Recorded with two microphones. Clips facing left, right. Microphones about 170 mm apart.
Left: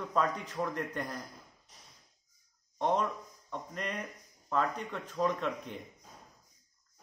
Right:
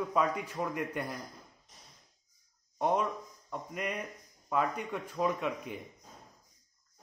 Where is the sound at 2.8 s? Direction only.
10° right (ahead or behind).